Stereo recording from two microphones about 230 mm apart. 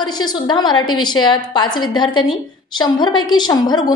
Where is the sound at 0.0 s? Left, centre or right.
Centre.